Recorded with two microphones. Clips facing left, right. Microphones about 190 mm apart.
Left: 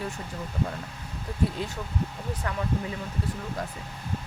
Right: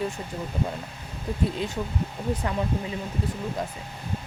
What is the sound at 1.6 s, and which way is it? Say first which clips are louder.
Speech: right 3 dB; 20° right (ahead or behind).